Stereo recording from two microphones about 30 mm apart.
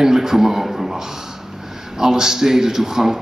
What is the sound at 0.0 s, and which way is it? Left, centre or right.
A man's voice, centre.